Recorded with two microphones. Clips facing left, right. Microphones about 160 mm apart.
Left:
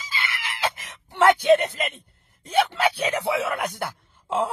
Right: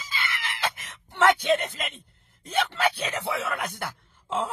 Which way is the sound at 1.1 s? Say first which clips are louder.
Left 5 dB; 10° left (ahead or behind).